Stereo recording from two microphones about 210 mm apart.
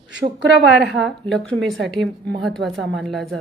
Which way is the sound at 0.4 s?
55° right (ahead or behind).